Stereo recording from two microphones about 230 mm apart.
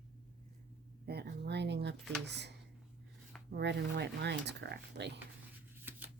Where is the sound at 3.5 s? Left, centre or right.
Right.